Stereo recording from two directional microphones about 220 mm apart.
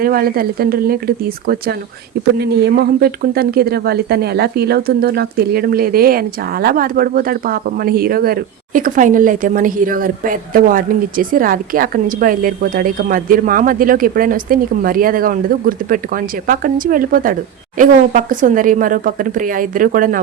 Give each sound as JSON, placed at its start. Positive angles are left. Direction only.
{"t": 0.0, "sound": "speech", "side_deg": -40}